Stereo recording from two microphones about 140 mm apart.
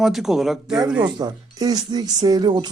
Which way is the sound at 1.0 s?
30° right (ahead or behind).